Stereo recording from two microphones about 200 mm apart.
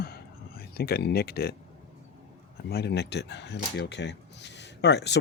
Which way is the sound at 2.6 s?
55° left (ahead or behind).